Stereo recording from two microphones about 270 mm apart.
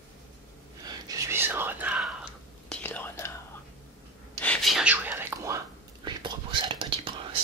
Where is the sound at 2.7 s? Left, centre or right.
Centre.